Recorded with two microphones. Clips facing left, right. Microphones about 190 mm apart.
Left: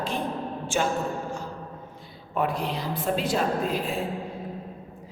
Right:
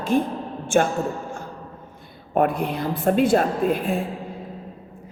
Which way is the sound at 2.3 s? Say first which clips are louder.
Right 6 dB; 55° right (ahead or behind).